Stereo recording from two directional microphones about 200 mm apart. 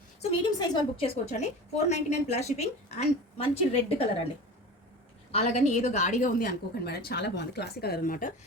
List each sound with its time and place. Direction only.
0.6 s a woman's voice: 25° left (ahead or behind)
5.3 s a woman's voice: 35° left (ahead or behind)